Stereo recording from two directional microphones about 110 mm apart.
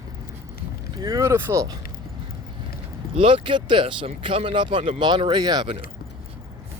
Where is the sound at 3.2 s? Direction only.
55° right (ahead or behind).